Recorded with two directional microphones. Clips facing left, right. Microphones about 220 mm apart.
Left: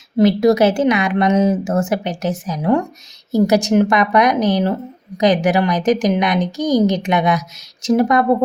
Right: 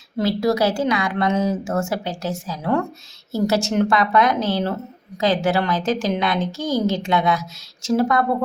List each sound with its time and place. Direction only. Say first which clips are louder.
0.2 s a woman's voice: left 7 dB; 20° left (ahead or behind)